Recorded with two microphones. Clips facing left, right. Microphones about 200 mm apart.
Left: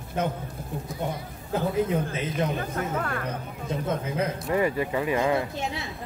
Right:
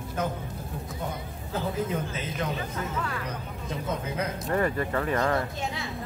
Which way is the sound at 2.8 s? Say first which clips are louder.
Left 3 dB; 55° left (ahead or behind).